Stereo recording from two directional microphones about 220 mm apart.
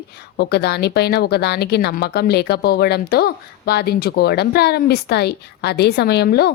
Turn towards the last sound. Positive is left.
turn(degrees=45)  # may be behind; listen again after turning